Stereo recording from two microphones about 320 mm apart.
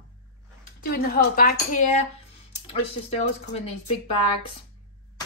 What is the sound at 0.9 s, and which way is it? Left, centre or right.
Speech, left.